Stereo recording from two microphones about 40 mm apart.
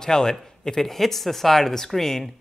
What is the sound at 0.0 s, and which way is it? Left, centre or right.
Speech, centre.